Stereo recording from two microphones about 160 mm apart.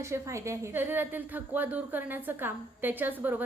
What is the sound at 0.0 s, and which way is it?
A woman's voice, 20° right (ahead or behind).